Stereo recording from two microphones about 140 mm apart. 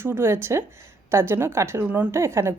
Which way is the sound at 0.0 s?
15° right (ahead or behind).